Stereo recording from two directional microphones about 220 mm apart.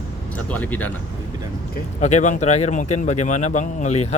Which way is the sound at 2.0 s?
30° left (ahead or behind).